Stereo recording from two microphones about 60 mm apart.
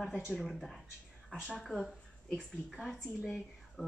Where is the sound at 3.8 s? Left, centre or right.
Centre.